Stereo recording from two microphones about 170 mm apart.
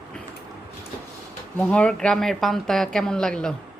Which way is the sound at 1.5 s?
5° left (ahead or behind).